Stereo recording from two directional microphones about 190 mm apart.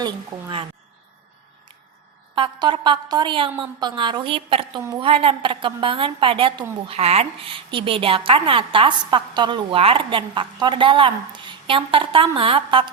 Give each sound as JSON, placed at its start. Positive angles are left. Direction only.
{"t": 0.0, "sound": "a woman's voice", "side_deg": -20}
{"t": 2.3, "sound": "a woman's voice", "side_deg": -25}